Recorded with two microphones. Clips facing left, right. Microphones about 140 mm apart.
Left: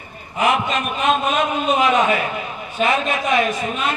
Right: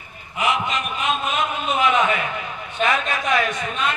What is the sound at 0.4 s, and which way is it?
Speech, 55° left (ahead or behind).